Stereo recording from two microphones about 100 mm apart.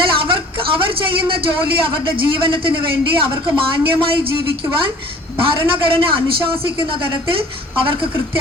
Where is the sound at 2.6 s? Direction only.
60° right (ahead or behind).